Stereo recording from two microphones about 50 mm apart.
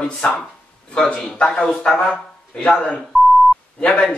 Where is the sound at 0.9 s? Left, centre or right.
Centre.